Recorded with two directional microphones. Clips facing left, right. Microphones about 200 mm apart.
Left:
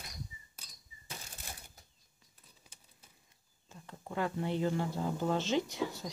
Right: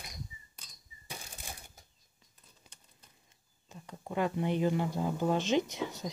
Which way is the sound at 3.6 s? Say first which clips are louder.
Right 3 dB; 15° right (ahead or behind).